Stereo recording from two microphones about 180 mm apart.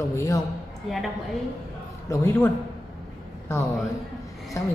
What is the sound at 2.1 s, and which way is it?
Speech, 10° left (ahead or behind).